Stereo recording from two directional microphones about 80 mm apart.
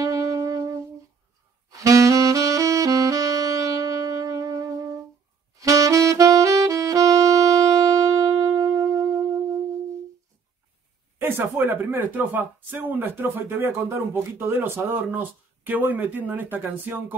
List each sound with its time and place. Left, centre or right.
0.0 s music: right
1.8 s saxophone: right
11.1 s speech: right